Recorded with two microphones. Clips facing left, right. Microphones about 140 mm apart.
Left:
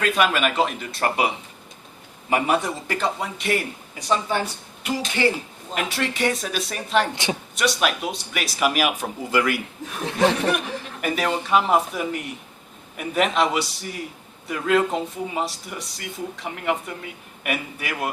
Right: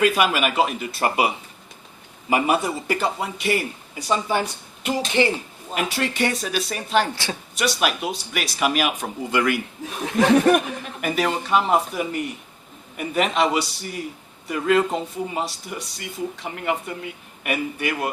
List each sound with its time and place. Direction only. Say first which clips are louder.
0.0 s speech: right 2 dB; 10° right (ahead or behind)
2.3 s speech: right 1 dB; 10° right (ahead or behind)
4.8 s speech: right 2 dB; 25° right (ahead or behind)
5.7 s speech: right 2 dB; centre (ahead or behind)
10.3 s speech: right 8 dB; 45° right (ahead or behind)
11.0 s speech: right 1 dB; centre (ahead or behind)